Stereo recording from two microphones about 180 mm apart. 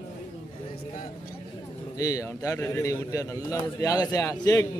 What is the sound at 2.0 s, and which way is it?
A man's voice, 20° left (ahead or behind).